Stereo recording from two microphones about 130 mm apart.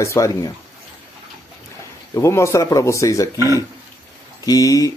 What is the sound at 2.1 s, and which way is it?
Speech, 20° left (ahead or behind).